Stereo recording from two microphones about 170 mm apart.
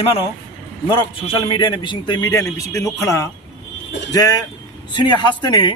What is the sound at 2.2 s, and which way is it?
A man's voice, 15° left (ahead or behind).